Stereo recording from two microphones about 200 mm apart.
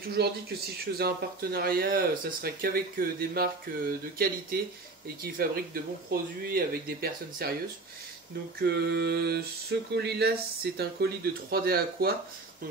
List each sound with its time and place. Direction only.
0.0 s speech: 50° right (ahead or behind)
8.6 s speech: 55° right (ahead or behind)